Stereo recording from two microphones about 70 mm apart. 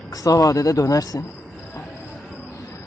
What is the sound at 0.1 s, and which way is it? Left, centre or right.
A man's voice, left.